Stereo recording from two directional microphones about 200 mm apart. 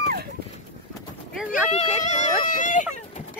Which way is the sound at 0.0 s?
50° right (ahead or behind).